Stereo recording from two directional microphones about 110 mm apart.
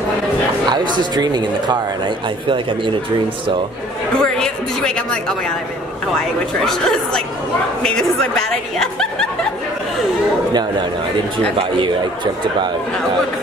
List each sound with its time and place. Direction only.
0.7 s speech: 40° right (ahead or behind)
4.2 s a woman's voice: 10° left (ahead or behind)